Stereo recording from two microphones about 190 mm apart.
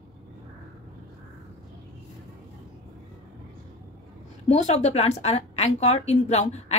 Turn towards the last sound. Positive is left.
turn(degrees=35)  # may be behind; listen again after turning